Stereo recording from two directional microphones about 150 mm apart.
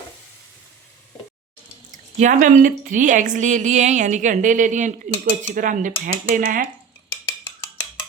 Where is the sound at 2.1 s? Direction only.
60° right (ahead or behind).